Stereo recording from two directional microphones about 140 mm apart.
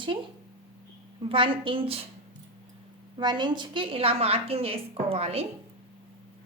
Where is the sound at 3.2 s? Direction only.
35° right (ahead or behind).